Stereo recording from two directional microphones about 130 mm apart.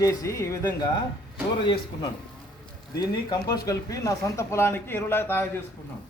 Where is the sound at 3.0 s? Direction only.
30° left (ahead or behind).